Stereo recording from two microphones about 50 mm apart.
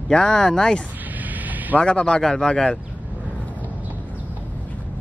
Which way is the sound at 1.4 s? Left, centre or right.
Right.